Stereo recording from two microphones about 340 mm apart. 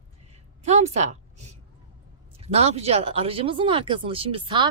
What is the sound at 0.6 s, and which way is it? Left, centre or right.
Speech, centre.